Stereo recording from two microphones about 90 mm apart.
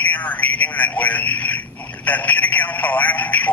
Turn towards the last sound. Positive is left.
turn(degrees=15)  # may be behind; listen again after turning